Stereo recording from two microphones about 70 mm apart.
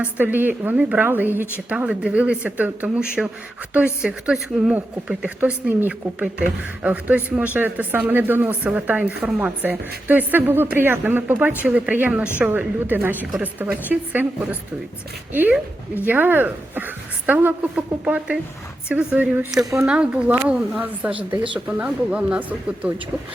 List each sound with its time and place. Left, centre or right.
0.0 s speech: right
1.7 s speech: centre
4.0 s speech: centre
4.7 s speech: centre
19.5 s speech: centre
19.9 s speech: centre